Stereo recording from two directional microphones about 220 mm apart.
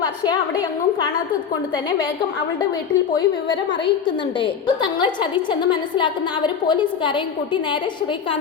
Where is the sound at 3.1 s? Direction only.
20° left (ahead or behind).